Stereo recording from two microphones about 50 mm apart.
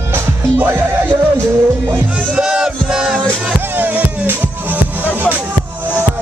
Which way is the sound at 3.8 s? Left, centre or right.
Right.